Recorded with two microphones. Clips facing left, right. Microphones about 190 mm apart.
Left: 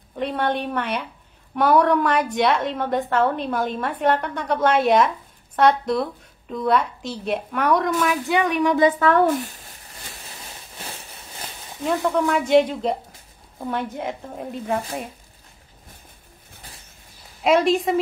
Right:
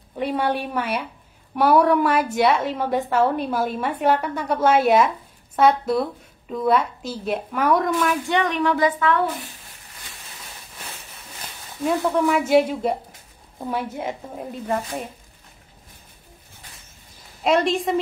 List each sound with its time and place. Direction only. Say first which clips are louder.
0.1 s a woman's voice: right 1 dB; 10° right (ahead or behind); by 8.7 s 10° left (ahead or behind)
9.0 s speech: left 4 dB; 45° left (ahead or behind)
12.3 s a woman's voice: left 1 dB; 5° right (ahead or behind)
17.4 s a woman's voice: left 2 dB; centre (ahead or behind)